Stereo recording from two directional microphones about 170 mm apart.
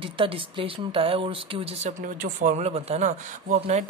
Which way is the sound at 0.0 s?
30° right (ahead or behind).